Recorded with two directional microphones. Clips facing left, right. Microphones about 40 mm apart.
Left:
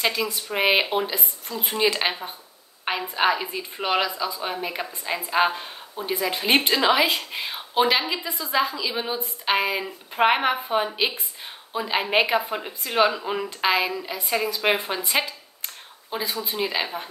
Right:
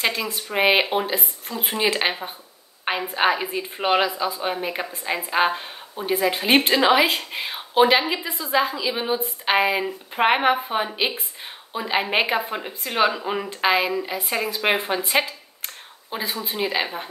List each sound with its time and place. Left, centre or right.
0.0 s speech: centre
2.8 s a sound: centre
3.2 s speech: centre
16.1 s speech: centre